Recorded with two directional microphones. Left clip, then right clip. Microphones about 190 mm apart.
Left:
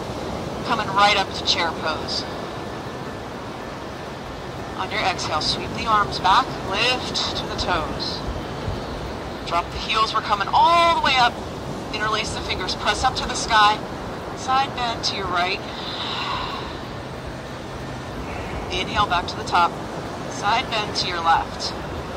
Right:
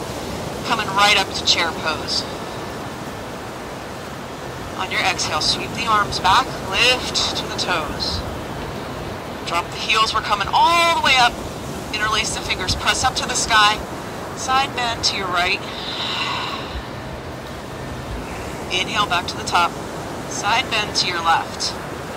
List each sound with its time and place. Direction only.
0.7 s speech: 15° left (ahead or behind)
4.7 s speech: 15° left (ahead or behind)
9.5 s speech: 15° left (ahead or behind)
18.7 s speech: 15° left (ahead or behind)